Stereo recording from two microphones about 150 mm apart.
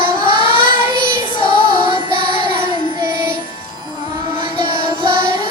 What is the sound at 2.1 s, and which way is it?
Child singing, 35° left (ahead or behind).